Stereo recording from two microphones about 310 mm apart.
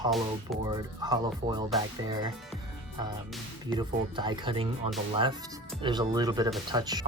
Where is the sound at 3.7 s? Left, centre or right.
Centre.